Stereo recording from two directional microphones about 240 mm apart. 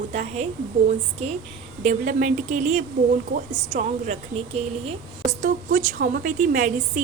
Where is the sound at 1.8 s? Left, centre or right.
Right.